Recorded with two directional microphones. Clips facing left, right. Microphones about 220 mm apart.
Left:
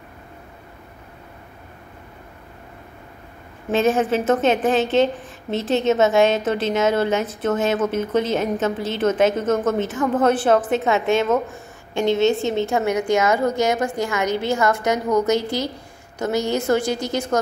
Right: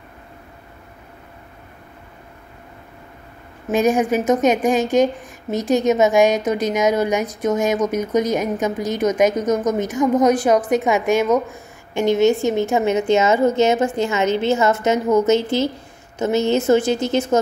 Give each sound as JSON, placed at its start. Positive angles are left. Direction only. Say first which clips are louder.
{"t": 3.6, "sound": "a woman's voice", "louder": "right 2 dB", "side_deg": -15}